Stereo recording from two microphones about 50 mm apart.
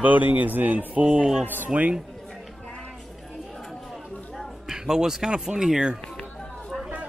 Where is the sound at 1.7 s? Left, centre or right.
Right.